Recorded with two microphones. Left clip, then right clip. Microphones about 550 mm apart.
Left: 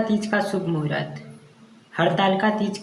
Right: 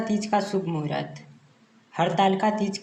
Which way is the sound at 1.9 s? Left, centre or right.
Left.